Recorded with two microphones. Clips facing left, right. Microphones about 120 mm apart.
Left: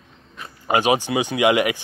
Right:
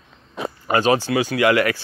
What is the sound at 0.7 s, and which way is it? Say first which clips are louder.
Speech: right 1 dB; 15° left (ahead or behind).